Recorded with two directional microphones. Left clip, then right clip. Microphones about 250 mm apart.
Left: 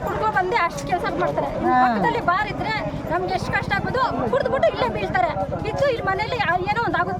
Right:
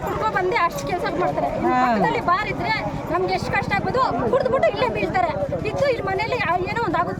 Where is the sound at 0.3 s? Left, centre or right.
Centre.